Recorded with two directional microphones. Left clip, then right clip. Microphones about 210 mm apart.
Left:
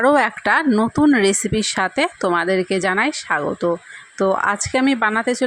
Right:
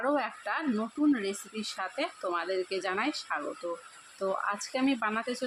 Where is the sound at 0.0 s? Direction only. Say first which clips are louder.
Left 15 dB; 45° left (ahead or behind).